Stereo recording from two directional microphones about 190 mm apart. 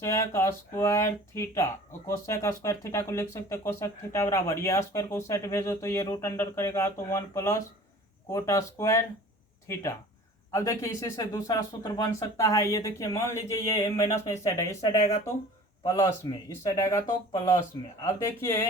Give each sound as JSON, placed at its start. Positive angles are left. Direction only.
{"t": 0.0, "sound": "speech", "side_deg": 15}
{"t": 16.6, "sound": "speech", "side_deg": 15}